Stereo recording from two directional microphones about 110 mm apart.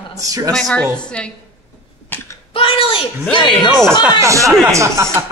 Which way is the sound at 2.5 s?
55° left (ahead or behind).